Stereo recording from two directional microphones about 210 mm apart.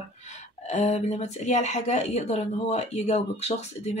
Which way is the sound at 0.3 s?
35° left (ahead or behind).